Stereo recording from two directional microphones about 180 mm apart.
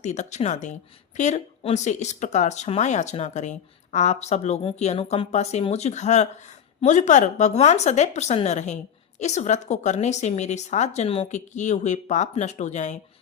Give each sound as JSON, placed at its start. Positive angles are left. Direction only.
{"t": 0.0, "sound": "a woman's voice", "side_deg": 40}